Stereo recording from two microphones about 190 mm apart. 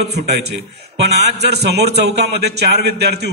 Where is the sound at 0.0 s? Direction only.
60° right (ahead or behind).